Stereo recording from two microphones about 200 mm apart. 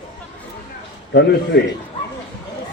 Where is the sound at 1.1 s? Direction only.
55° left (ahead or behind).